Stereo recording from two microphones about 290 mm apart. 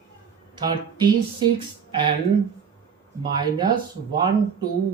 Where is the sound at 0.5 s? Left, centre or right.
Centre.